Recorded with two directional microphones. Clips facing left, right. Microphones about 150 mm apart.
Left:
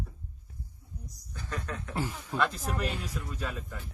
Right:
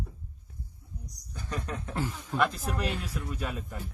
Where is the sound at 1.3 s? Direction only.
20° right (ahead or behind).